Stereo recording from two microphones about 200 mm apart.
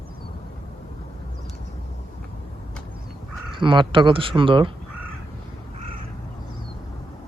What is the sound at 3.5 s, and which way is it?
Speech, 25° right (ahead or behind).